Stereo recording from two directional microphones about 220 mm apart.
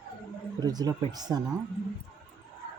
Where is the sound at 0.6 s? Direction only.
15° right (ahead or behind).